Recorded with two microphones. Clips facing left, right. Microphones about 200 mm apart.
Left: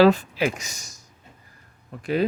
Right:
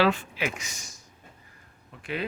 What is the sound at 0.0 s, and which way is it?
Speech, 40° left (ahead or behind).